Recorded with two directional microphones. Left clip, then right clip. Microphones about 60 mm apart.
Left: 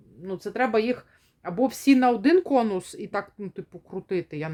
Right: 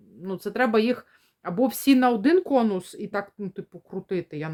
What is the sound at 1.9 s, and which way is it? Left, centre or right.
Speech, centre.